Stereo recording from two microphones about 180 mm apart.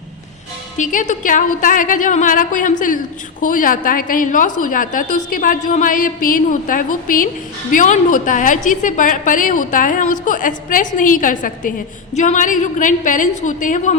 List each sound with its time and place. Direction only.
0.8 s a woman's voice: 45° left (ahead or behind)